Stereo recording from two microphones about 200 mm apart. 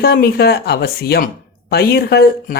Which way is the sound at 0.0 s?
50° left (ahead or behind).